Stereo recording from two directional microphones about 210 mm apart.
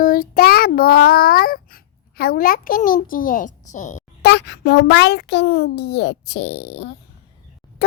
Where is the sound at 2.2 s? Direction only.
45° left (ahead or behind).